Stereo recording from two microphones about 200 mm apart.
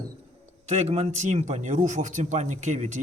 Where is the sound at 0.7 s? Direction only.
35° right (ahead or behind).